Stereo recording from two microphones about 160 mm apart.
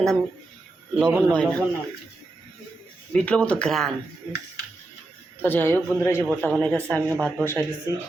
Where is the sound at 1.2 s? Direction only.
5° left (ahead or behind).